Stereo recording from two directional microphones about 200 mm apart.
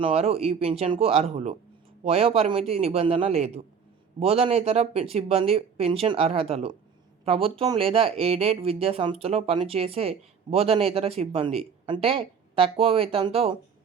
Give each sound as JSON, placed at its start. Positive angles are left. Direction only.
{"t": 0.0, "sound": "a man's voice", "side_deg": -30}